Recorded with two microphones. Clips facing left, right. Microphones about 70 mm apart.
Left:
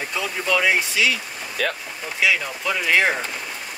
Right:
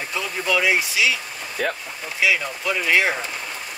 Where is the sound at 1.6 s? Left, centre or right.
Left.